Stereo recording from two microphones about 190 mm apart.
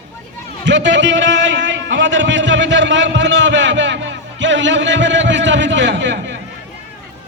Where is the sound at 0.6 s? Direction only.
70° right (ahead or behind).